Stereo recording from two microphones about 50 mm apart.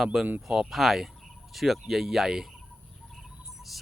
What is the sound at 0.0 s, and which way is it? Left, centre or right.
Speech, centre.